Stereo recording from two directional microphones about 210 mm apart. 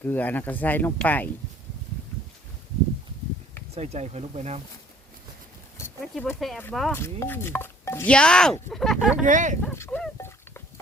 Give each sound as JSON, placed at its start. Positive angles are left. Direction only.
{"t": 0.0, "sound": "speech", "side_deg": 10}
{"t": 3.8, "sound": "speech", "side_deg": -30}
{"t": 6.0, "sound": "speech", "side_deg": 5}
{"t": 9.2, "sound": "speech", "side_deg": -35}
{"t": 9.6, "sound": "livestock", "side_deg": 10}